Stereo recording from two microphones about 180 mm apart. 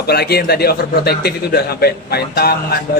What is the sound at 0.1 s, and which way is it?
A man's voice, 60° left (ahead or behind).